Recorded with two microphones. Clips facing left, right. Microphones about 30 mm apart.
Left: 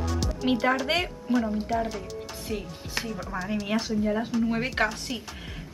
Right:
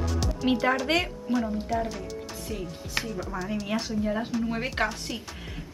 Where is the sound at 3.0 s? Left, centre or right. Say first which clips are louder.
Even; centre.